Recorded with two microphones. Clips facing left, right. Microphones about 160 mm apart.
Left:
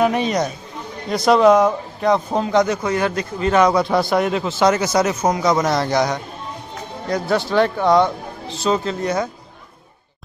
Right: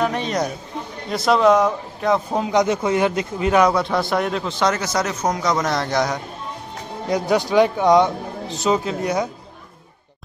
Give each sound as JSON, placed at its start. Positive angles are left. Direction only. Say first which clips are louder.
{"t": 0.0, "sound": "a sound", "louder": "left 4 dB", "side_deg": 10}
{"t": 1.1, "sound": "speech", "louder": "left 3 dB", "side_deg": 0}
{"t": 7.1, "sound": "speech", "louder": "right 1 dB", "side_deg": -15}